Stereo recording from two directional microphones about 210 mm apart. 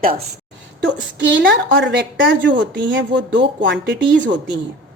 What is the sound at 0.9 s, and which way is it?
A woman's voice, 60° right (ahead or behind).